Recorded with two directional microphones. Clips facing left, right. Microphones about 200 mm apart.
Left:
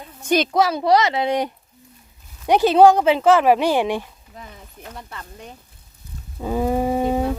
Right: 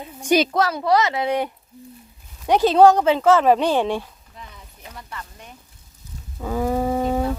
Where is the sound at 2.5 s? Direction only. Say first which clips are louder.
Left 1 dB; 10° left (ahead or behind).